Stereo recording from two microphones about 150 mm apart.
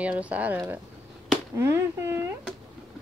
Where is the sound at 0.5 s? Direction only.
15° right (ahead or behind).